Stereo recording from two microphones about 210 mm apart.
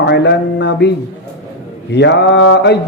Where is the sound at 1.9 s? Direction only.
55° left (ahead or behind).